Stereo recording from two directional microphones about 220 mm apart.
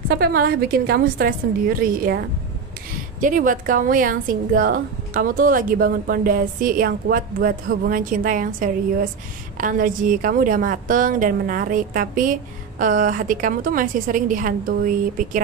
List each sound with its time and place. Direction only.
0.1 s a woman's voice: 45° right (ahead or behind)
3.2 s a woman's voice: 35° right (ahead or behind)